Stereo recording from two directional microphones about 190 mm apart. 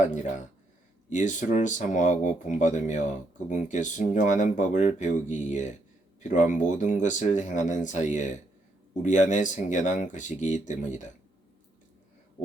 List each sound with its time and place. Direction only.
0.0 s speech: 40° left (ahead or behind)